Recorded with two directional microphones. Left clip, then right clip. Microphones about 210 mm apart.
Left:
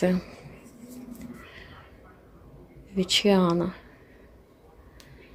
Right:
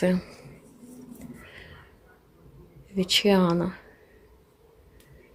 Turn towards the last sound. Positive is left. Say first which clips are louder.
# even
turn(degrees=0)  # may be behind; listen again after turning